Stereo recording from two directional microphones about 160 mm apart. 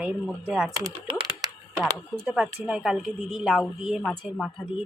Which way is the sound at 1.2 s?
25° right (ahead or behind).